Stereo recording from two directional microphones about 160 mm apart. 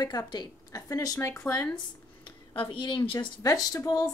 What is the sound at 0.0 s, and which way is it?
Speech, 25° left (ahead or behind).